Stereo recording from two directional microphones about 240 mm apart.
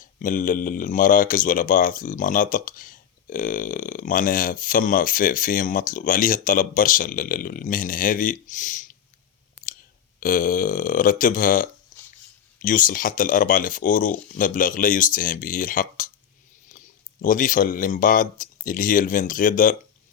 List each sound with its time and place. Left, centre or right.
0.0 s speech: left
10.2 s speech: left